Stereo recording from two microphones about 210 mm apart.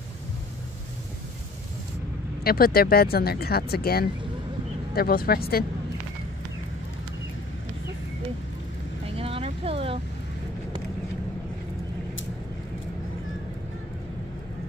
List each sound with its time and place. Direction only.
2.4 s speech: 45° left (ahead or behind)
9.0 s vehicle: 25° right (ahead or behind)